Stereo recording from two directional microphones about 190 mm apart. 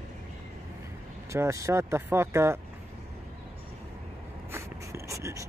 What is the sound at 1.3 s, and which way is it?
Speech, 15° right (ahead or behind).